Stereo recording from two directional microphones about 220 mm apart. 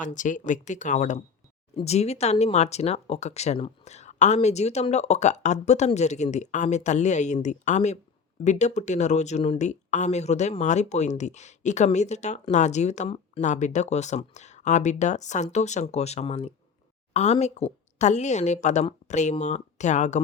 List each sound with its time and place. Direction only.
0.0 s speech: 35° left (ahead or behind)